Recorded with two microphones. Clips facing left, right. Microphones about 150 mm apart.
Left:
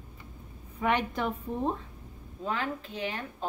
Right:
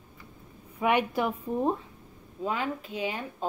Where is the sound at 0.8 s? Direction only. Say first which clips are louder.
Right 3 dB; 10° right (ahead or behind).